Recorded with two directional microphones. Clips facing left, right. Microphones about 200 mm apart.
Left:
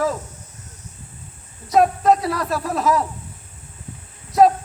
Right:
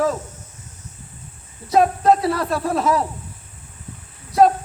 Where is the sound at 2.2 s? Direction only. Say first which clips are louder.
Right 2 dB; 30° right (ahead or behind).